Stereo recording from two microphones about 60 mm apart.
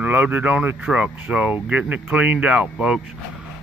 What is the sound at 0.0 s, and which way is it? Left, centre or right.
A man's voice, right.